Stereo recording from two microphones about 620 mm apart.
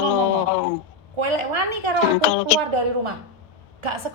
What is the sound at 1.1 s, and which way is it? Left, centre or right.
A woman's voice, right.